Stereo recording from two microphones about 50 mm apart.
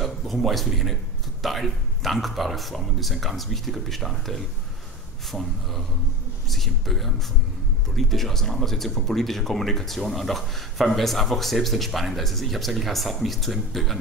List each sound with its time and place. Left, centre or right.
0.0 s speech: centre